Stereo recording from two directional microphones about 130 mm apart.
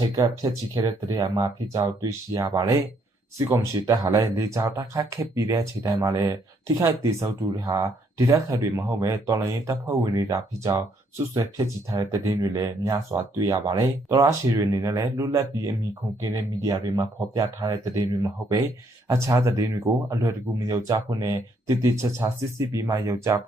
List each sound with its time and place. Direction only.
0.4 s speech: 30° right (ahead or behind)